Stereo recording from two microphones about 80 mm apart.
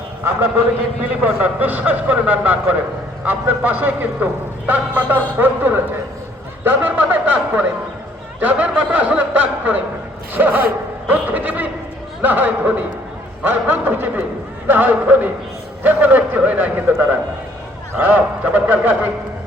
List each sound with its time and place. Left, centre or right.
1.2 s a man's voice: right